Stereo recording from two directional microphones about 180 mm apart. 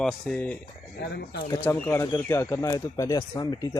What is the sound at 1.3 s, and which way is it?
Speech, 15° left (ahead or behind).